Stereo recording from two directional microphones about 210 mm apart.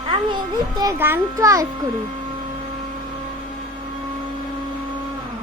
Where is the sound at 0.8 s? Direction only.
15° right (ahead or behind).